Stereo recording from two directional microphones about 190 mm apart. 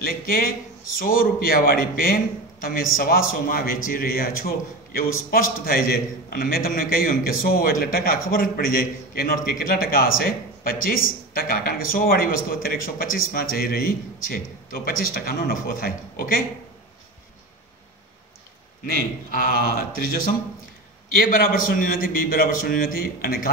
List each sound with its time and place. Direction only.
0.0 s a man's voice: 50° left (ahead or behind)
19.3 s a man's voice: 50° left (ahead or behind)